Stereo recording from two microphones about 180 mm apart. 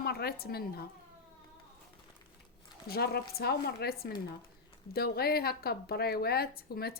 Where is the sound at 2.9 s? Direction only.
60° left (ahead or behind).